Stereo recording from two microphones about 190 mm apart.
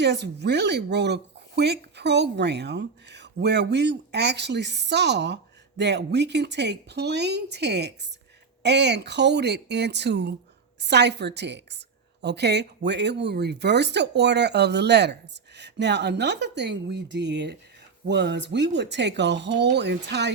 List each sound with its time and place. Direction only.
0.0 s speech: 65° right (ahead or behind)